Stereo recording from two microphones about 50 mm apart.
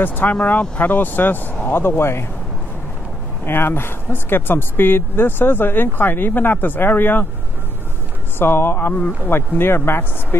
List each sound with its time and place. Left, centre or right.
0.0 s speech: left
1.7 s speech: left
3.4 s speech: left
8.4 s speech: left
9.3 s speech: left